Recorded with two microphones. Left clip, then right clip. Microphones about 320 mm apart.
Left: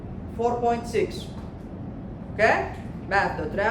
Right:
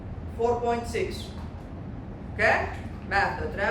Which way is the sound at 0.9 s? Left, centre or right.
Left.